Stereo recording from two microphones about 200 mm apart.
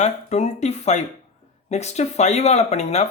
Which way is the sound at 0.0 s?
35° left (ahead or behind).